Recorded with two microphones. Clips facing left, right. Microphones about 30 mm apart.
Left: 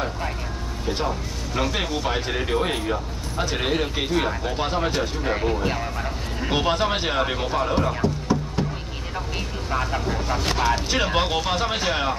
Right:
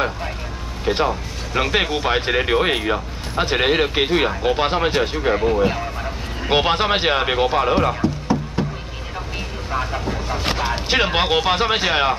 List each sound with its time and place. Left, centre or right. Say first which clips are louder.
0.8 s speech: right 7 dB; right
5.3 s speech: right 5 dB; centre
6.5 s speech: right 5 dB; right
7.9 s music: right 2 dB; centre
9.7 s vehicle: right 1 dB; centre
10.4 s speech: even; right